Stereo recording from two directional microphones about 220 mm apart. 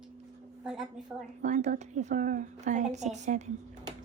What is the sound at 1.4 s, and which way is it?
A woman's voice, 30° right (ahead or behind).